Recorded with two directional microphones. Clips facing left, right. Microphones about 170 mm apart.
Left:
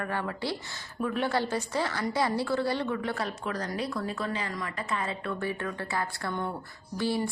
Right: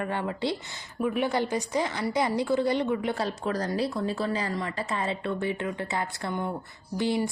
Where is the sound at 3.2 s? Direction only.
35° right (ahead or behind).